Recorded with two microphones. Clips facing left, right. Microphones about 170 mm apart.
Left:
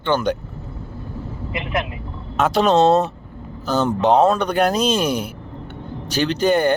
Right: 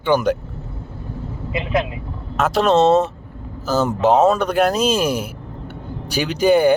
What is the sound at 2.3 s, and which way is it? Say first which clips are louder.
Speech: even; centre (ahead or behind).